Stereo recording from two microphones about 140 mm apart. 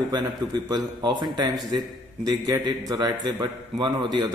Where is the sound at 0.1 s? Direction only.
30° right (ahead or behind).